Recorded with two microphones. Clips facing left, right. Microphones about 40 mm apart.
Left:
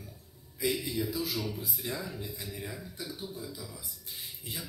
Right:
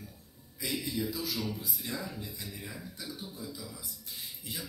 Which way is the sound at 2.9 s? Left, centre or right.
Left.